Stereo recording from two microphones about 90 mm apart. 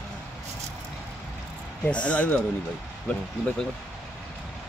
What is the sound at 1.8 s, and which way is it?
Speech, 15° left (ahead or behind).